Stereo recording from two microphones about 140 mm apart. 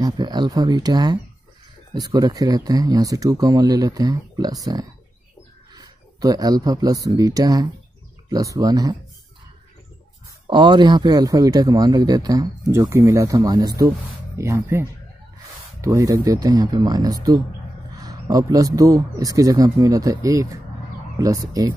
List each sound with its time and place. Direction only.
0.0 s speech: 30° right (ahead or behind)
10.4 s speech: 35° right (ahead or behind)